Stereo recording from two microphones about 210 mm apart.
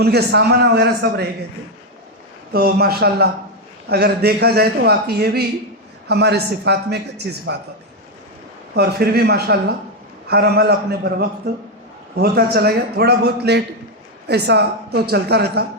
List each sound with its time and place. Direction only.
0.0 s a man's voice: 50° right (ahead or behind)
2.5 s a man's voice: 50° right (ahead or behind)
8.7 s a man's voice: 50° right (ahead or behind)